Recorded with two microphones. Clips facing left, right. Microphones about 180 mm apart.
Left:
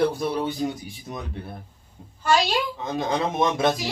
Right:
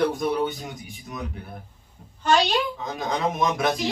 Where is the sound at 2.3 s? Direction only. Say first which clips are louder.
Right 1 dB; 10° left (ahead or behind).